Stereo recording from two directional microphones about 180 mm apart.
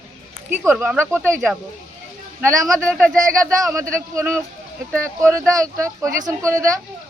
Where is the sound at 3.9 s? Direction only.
15° right (ahead or behind).